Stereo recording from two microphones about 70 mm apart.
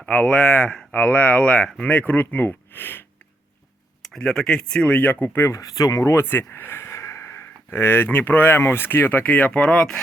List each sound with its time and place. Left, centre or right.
0.0 s speech: centre
4.1 s speech: centre; by 5.5 s left
5.5 s speech: left
6.0 s speech: left; by 10.0 s centre